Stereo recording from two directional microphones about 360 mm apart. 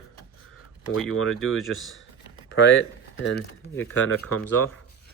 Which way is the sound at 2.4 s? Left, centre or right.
Left.